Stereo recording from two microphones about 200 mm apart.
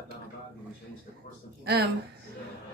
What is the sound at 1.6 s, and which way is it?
Speech, 55° right (ahead or behind).